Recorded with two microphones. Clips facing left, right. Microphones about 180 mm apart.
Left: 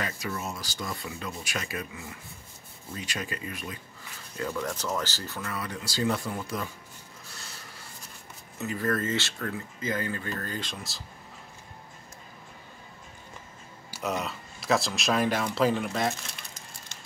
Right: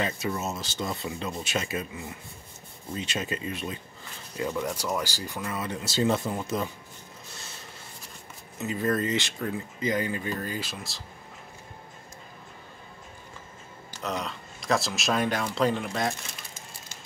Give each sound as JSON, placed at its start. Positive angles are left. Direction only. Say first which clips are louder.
{"t": 0.0, "sound": "speech", "louder": "right 4 dB", "side_deg": -25}
{"t": 4.4, "sound": "speech", "louder": "right 2 dB", "side_deg": -15}
{"t": 8.5, "sound": "speech", "louder": "right 2 dB", "side_deg": -20}
{"t": 13.8, "sound": "speech", "louder": "left 1 dB", "side_deg": 10}